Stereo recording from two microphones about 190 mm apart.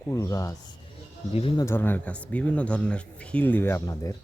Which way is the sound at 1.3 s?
30° left (ahead or behind).